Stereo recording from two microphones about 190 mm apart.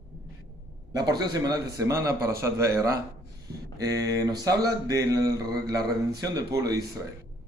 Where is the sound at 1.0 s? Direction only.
20° right (ahead or behind).